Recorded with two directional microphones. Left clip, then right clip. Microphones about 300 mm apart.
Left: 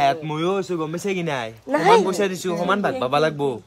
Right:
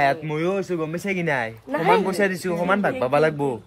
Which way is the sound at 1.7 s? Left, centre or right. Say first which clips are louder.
Left 4 dB; left.